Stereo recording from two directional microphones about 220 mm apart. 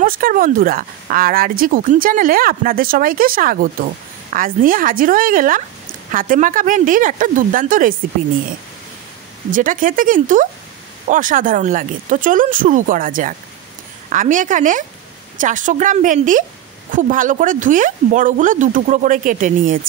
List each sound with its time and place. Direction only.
0.0 s speech: 40° right (ahead or behind)
9.5 s speech: 40° right (ahead or behind)